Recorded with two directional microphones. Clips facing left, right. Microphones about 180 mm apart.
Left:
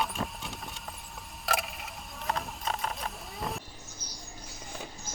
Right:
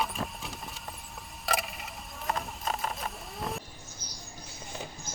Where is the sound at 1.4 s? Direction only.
Centre (ahead or behind).